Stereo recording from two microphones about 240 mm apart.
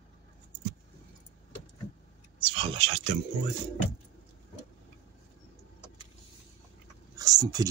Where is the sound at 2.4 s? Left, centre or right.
Right.